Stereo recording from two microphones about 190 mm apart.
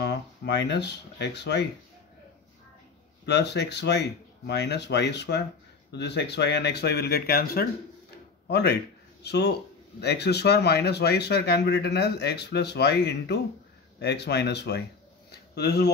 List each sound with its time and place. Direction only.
0.0 s speech: 65° left (ahead or behind)
3.3 s speech: 60° left (ahead or behind)